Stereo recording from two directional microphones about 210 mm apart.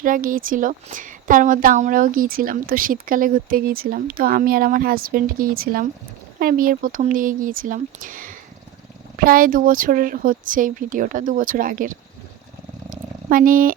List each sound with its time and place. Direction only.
0.0 s a woman's voice: 40° right (ahead or behind)
12.9 s purr: 40° right (ahead or behind)